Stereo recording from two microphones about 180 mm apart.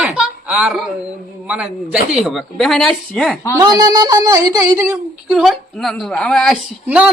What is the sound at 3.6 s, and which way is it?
A woman's voice, 20° right (ahead or behind).